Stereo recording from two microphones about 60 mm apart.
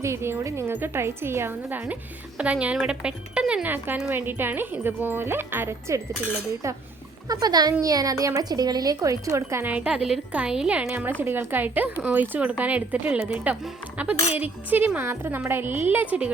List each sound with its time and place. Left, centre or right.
0.0 s speech: right
1.7 s speech: right
3.7 s speech: right
7.3 s speech: right
9.6 s speech: right
11.2 s speech: right